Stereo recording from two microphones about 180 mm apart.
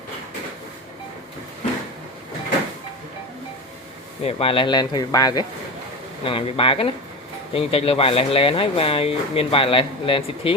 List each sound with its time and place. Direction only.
4.2 s speech: 35° left (ahead or behind)